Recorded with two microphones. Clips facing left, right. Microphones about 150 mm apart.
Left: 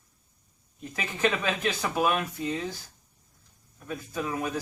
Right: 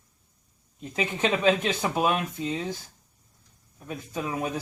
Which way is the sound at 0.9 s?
20° right (ahead or behind).